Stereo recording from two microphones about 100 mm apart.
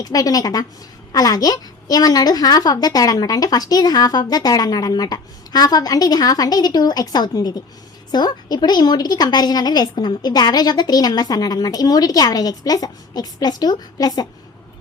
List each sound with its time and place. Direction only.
0.0 s a woman's voice: 40° left (ahead or behind)